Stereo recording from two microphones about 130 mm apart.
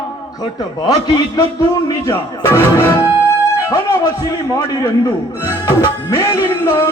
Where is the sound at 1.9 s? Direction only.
20° left (ahead or behind).